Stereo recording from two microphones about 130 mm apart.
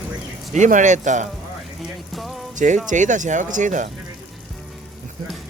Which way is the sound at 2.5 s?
75° right (ahead or behind).